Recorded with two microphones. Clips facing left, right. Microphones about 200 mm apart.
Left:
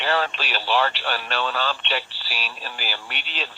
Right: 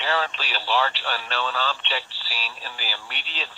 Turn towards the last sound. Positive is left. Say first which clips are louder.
# left 3 dB
turn(degrees=60)  # may be behind; listen again after turning